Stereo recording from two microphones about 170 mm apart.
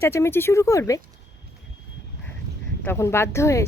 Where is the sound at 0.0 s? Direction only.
15° left (ahead or behind).